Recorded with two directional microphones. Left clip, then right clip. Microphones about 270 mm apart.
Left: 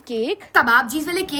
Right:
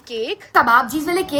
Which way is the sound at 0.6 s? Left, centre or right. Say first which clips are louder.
Right 2 dB; centre.